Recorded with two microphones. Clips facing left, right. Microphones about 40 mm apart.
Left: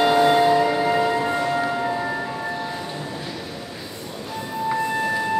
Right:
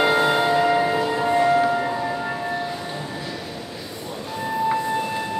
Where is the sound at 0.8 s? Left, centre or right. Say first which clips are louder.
Left 2 dB; centre.